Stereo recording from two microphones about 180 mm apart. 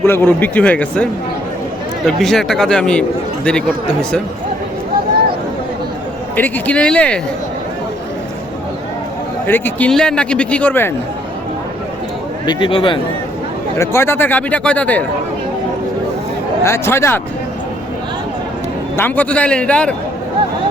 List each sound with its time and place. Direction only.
0.0 s a man's voice: 10° left (ahead or behind)
2.0 s speech: centre (ahead or behind)
6.3 s a man's voice: 10° left (ahead or behind)
9.5 s a man's voice: 10° left (ahead or behind)
12.5 s speech: 25° left (ahead or behind)
13.7 s a man's voice: 15° left (ahead or behind)
16.6 s a man's voice: 15° left (ahead or behind)
18.9 s a man's voice: 10° left (ahead or behind)